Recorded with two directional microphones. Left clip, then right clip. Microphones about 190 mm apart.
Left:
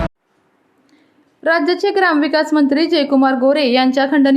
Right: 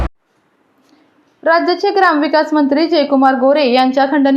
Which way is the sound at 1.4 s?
20° left (ahead or behind).